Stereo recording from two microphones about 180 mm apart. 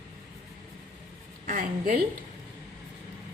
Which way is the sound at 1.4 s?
50° right (ahead or behind).